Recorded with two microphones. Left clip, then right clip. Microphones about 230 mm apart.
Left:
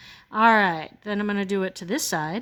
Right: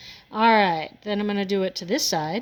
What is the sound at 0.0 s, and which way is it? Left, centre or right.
A woman's voice, left.